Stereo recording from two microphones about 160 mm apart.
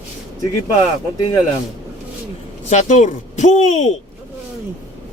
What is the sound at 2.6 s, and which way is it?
Speech, 45° left (ahead or behind).